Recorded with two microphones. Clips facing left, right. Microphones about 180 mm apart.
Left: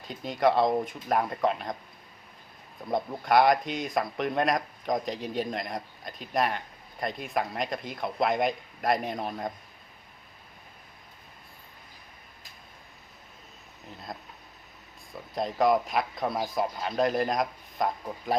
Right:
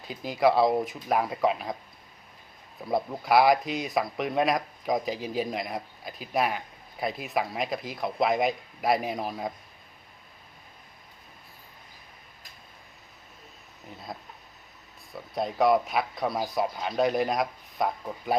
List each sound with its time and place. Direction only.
0.0 s speech: centre (ahead or behind)
2.9 s speech: 5° right (ahead or behind)
15.4 s speech: centre (ahead or behind)